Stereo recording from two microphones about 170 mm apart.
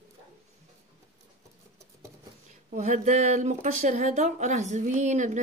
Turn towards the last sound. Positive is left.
turn(degrees=-45)  # may be behind; listen again after turning